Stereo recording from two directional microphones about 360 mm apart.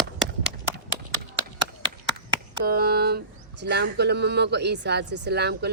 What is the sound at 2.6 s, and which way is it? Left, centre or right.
Speech, right.